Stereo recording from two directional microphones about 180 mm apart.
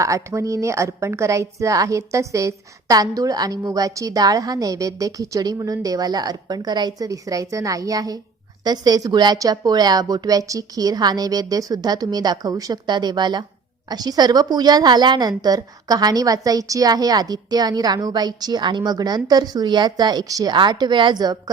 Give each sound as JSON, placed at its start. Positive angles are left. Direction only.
{"t": 0.0, "sound": "a woman's voice", "side_deg": -15}